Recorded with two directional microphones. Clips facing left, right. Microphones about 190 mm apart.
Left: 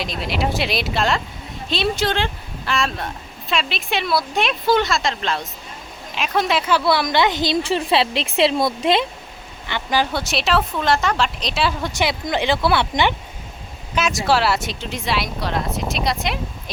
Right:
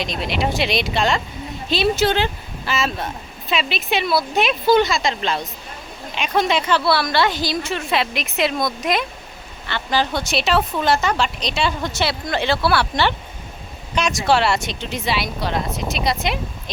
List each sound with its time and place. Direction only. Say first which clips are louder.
0.0 s a woman's voice: right 1 dB; 5° left (ahead or behind); by 9.0 s 30° left (ahead or behind)
9.6 s speech: even; 15° left (ahead or behind)
11.9 s speech: left 1 dB; 15° left (ahead or behind)
13.9 s speech: right 1 dB; 5° left (ahead or behind)